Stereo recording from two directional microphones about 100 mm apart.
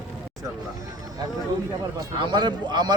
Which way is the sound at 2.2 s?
50° right (ahead or behind).